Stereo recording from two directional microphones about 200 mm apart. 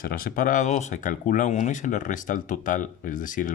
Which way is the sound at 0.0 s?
45° left (ahead or behind).